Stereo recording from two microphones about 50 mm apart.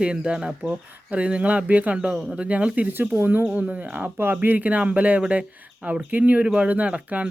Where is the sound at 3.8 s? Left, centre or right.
Right.